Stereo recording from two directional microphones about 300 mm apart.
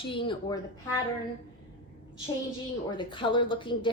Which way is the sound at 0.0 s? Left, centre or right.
Centre.